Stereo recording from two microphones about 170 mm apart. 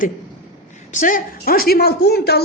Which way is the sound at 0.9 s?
50° left (ahead or behind).